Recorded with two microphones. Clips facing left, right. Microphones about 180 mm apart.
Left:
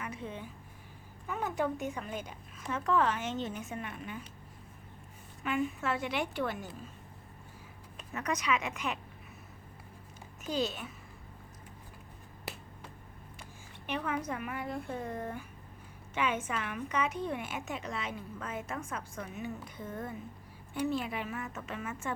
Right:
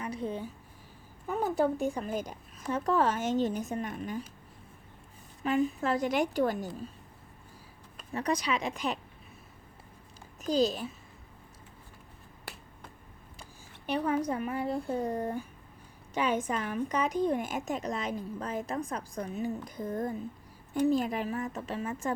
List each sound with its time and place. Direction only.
0.0 s a sound: 35° right (ahead or behind)
1.3 s a woman's voice: 35° right (ahead or behind)
5.4 s a woman's voice: 35° right (ahead or behind)
8.1 s a woman's voice: 35° right (ahead or behind)
10.4 s a woman's voice: 35° right (ahead or behind)
13.8 s a woman's voice: 35° right (ahead or behind)